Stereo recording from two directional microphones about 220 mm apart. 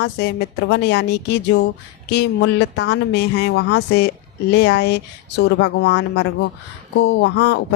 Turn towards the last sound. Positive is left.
turn(degrees=50)  # may be behind; listen again after turning